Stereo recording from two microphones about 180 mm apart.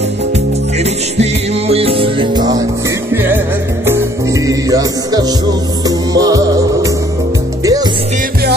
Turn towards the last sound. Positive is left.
turn(degrees=-20)  # may be behind; listen again after turning